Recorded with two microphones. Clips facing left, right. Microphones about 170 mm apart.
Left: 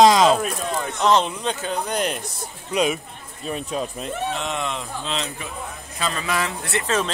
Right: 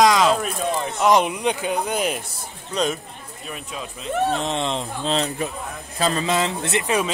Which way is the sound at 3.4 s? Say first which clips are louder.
Left 7 dB; 35° left (ahead or behind).